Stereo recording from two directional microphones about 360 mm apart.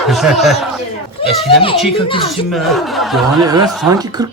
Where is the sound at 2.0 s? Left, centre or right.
Centre.